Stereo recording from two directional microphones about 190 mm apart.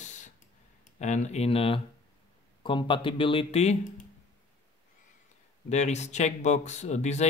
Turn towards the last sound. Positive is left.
turn(degrees=35)  # may be behind; listen again after turning